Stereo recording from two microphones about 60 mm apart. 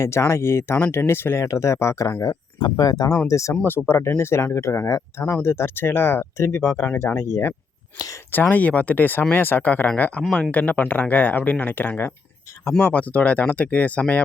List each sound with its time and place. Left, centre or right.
0.0 s speech: left
1.5 s speech: left
2.2 s speech: left
3.2 s speech: left
3.6 s speech: left
5.2 s speech: left
8.3 s speech: left